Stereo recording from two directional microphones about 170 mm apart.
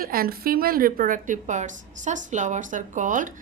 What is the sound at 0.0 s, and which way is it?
A woman's voice, 60° right (ahead or behind).